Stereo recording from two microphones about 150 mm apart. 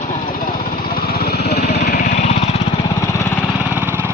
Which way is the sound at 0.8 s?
85° left.